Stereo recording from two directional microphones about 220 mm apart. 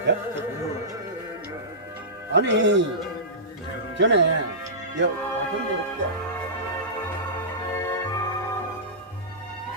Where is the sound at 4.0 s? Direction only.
55° right (ahead or behind).